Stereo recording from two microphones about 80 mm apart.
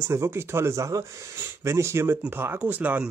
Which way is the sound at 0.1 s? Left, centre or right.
Right.